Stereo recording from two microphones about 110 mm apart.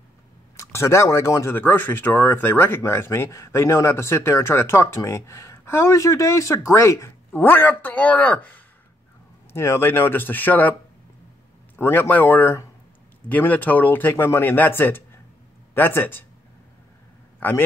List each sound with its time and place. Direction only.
0.6 s speech: 25° left (ahead or behind)
17.4 s a man's voice: 15° left (ahead or behind)